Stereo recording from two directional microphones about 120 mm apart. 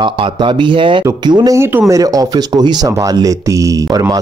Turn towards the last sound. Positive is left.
turn(degrees=-30)  # may be behind; listen again after turning